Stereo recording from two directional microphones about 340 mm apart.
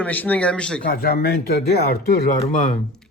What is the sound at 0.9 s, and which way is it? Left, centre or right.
Speech, left.